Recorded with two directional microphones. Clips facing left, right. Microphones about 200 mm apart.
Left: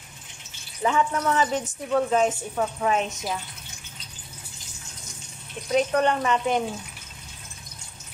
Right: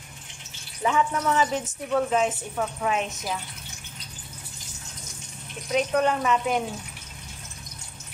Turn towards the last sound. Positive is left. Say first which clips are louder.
# left 1 dB
turn(degrees=-5)  # may be behind; listen again after turning